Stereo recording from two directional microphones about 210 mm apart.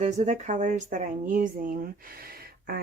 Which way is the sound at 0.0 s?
35° right (ahead or behind).